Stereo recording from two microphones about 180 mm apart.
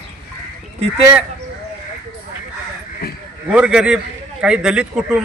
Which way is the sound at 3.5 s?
5° right (ahead or behind).